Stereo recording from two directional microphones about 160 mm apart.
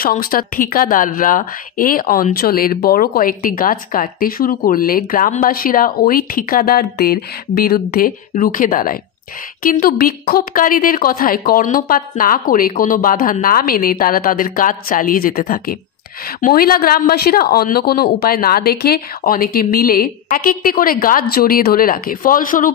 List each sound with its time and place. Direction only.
0.0 s speech: 65° left (ahead or behind)